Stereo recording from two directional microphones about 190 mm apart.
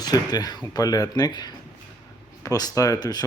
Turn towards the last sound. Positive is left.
turn(degrees=20)  # may be behind; listen again after turning